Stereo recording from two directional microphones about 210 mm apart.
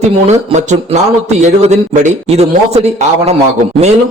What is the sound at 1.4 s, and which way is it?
A man's voice, 30° right (ahead or behind).